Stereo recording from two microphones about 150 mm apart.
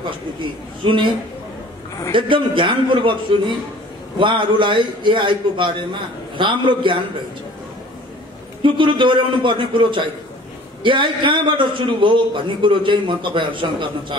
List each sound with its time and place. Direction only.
0.4 s a man's voice: 30° right (ahead or behind)
2.1 s a man's voice: 35° right (ahead or behind)
8.6 s a man's voice: 35° right (ahead or behind)